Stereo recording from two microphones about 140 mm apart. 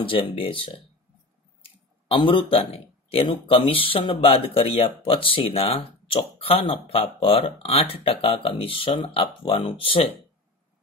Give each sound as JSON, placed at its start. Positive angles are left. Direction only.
{"t": 0.0, "sound": "speech", "side_deg": 40}
{"t": 1.6, "sound": "a sound", "side_deg": 40}
{"t": 3.4, "sound": "speech", "side_deg": 40}